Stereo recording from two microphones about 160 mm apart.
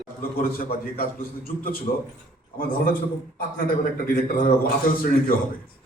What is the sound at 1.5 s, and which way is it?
A man's voice, 65° left (ahead or behind).